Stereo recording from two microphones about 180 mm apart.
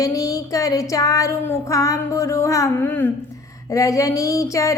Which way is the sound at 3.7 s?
20° left (ahead or behind).